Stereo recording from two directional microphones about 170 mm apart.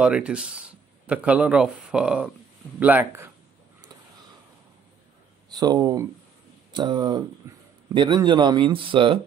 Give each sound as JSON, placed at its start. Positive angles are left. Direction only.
{"t": 0.0, "sound": "speech", "side_deg": -5}
{"t": 5.5, "sound": "speech", "side_deg": -25}